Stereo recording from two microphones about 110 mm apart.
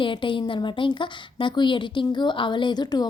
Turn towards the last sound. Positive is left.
turn(degrees=40)  # may be behind; listen again after turning